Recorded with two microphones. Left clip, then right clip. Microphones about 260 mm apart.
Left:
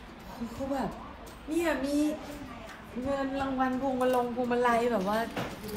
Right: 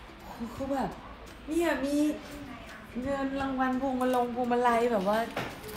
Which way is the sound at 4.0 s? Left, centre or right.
Centre.